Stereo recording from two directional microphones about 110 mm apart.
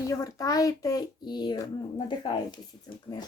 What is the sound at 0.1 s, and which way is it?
Speech, 30° left (ahead or behind).